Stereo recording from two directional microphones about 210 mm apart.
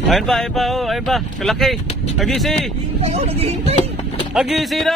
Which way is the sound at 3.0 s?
30° right (ahead or behind).